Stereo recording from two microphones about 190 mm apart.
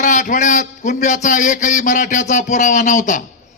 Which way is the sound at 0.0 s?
40° left (ahead or behind).